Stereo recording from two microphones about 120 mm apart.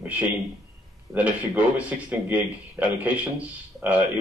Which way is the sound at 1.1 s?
10° right (ahead or behind).